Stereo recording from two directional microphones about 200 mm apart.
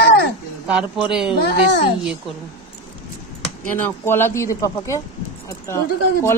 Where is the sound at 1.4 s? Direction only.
55° left (ahead or behind).